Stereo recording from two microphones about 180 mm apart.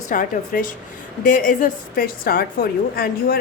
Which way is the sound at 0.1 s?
45° left (ahead or behind).